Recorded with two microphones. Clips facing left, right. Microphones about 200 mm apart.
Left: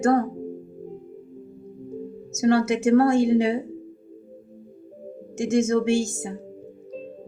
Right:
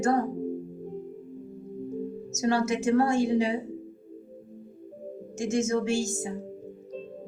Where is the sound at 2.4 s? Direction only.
60° left (ahead or behind).